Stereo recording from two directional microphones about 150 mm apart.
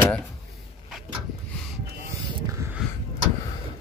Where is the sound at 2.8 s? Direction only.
5° right (ahead or behind).